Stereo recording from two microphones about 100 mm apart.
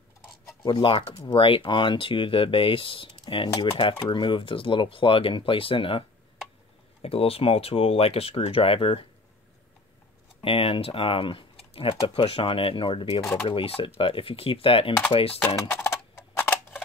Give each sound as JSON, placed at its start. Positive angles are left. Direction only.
{"t": 0.7, "sound": "speech", "side_deg": 55}
{"t": 7.0, "sound": "speech", "side_deg": 75}
{"t": 10.4, "sound": "speech", "side_deg": 65}
{"t": 13.2, "sound": "speech", "side_deg": 25}
{"t": 13.5, "sound": "speech", "side_deg": 70}
{"t": 15.4, "sound": "speech", "side_deg": 30}
{"t": 16.3, "sound": "tick", "side_deg": 20}